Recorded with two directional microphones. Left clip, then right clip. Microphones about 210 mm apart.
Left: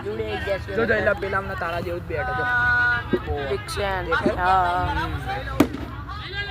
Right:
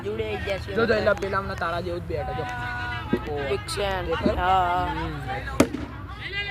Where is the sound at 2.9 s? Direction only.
40° right (ahead or behind).